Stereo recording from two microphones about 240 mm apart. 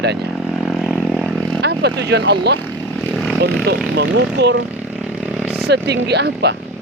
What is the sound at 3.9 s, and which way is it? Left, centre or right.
Speech, right.